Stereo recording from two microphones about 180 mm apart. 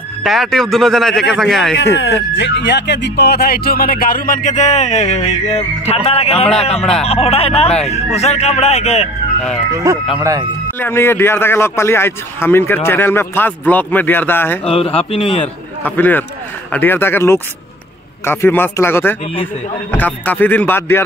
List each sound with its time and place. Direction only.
0.2 s speech: centre (ahead or behind)
2.0 s speech: 80° left; by 9.1 s 35° left (ahead or behind)
10.8 s a man's voice: 15° left (ahead or behind)
14.7 s speech: 30° left (ahead or behind)
15.8 s a man's voice: 10° left (ahead or behind)